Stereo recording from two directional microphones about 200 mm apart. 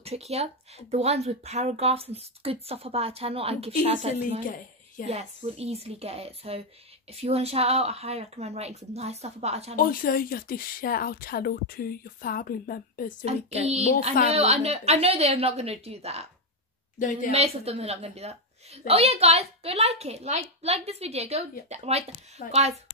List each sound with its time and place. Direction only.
0.0 s a woman's voice: 30° right (ahead or behind)
9.8 s a woman's voice: 45° left (ahead or behind)
13.2 s a woman's voice: 30° right (ahead or behind)
17.0 s speech: 40° left (ahead or behind)
17.3 s a woman's voice: 30° right (ahead or behind)